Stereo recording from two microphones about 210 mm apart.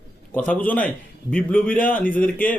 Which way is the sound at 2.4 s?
40° left (ahead or behind).